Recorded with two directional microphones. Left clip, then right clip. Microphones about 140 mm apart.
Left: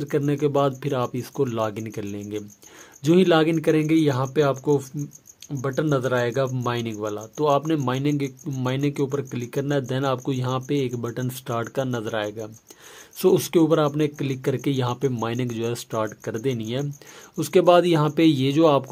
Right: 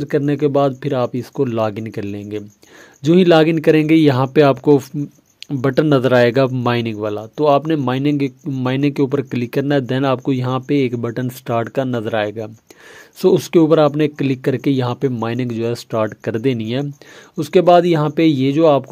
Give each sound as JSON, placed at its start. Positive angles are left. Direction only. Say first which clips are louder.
{"t": 0.0, "sound": "speech", "louder": "right 6 dB", "side_deg": -35}
{"t": 3.0, "sound": "speech", "louder": "right 5 dB", "side_deg": -30}
{"t": 3.3, "sound": "speech", "louder": "right 7 dB", "side_deg": -45}
{"t": 13.2, "sound": "speech", "louder": "right 6 dB", "side_deg": -30}
{"t": 17.4, "sound": "speech", "louder": "right 5 dB", "side_deg": -30}